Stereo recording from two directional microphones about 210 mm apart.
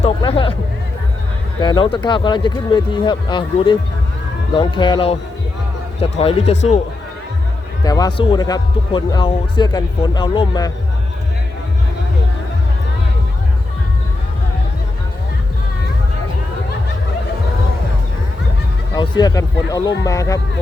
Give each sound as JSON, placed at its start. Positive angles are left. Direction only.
{"t": 0.0, "sound": "speech", "side_deg": 25}
{"t": 1.6, "sound": "speech", "side_deg": 20}
{"t": 7.9, "sound": "speech", "side_deg": 20}
{"t": 18.9, "sound": "speech", "side_deg": 20}